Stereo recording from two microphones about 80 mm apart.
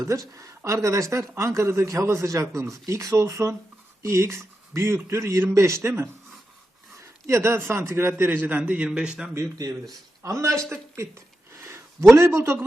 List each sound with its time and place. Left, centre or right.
0.0 s speech: right
7.0 s a man's voice: right; by 9.3 s centre
9.3 s speech: right
11.5 s a sound: right